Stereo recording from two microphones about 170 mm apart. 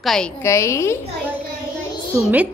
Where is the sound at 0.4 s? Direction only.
15° left (ahead or behind).